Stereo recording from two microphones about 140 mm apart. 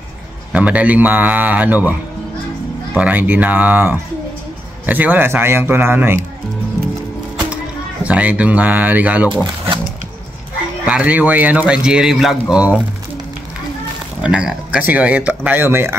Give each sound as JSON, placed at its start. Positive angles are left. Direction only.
{"t": 0.5, "sound": "a man's voice", "side_deg": -10}
{"t": 3.0, "sound": "a man's voice", "side_deg": -10}
{"t": 8.0, "sound": "a man's voice", "side_deg": -10}
{"t": 10.9, "sound": "a man's voice", "side_deg": -10}
{"t": 14.2, "sound": "a man's voice", "side_deg": -5}